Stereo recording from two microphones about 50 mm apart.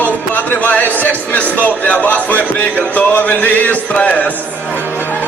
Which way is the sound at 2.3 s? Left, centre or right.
Left.